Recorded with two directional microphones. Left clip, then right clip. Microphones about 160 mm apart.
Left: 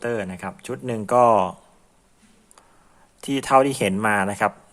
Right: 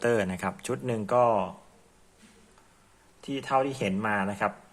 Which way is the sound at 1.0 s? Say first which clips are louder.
Left 8 dB; 30° left (ahead or behind).